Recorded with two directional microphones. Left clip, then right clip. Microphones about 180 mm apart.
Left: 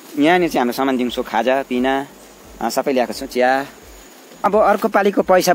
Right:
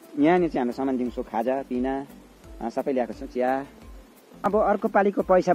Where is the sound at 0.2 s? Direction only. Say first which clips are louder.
Left 7 dB; 5° left (ahead or behind).